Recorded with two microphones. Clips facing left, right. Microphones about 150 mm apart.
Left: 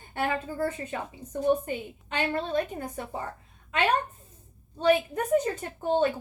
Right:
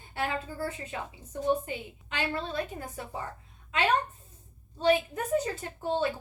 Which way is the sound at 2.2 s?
45° left (ahead or behind).